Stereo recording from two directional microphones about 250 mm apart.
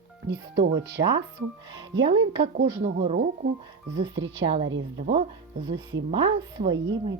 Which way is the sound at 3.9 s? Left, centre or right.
Right.